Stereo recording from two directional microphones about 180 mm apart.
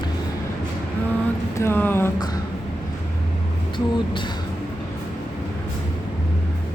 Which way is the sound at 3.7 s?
25° left (ahead or behind).